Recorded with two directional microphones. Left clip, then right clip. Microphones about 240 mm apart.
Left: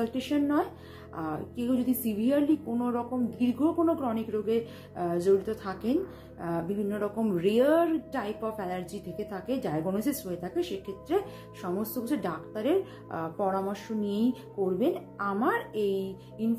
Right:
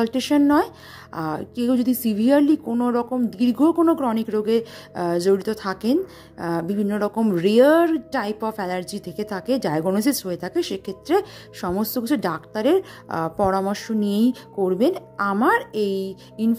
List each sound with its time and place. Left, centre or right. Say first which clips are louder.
0.0 s a woman's voice: right 10 dB; right